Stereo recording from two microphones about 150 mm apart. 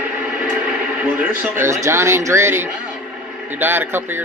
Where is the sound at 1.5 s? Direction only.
20° right (ahead or behind).